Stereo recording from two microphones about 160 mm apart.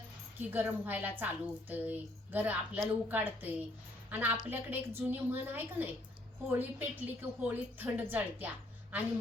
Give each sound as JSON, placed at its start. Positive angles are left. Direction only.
{"t": 0.3, "sound": "a woman's voice", "side_deg": -10}